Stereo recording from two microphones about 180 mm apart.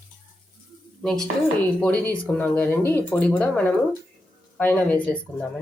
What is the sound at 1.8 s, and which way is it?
A woman's voice, 10° left (ahead or behind).